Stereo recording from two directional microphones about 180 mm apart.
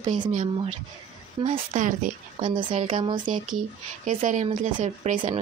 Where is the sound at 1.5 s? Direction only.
45° right (ahead or behind).